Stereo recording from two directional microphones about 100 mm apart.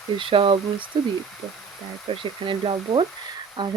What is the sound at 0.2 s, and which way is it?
Speech, 60° right (ahead or behind).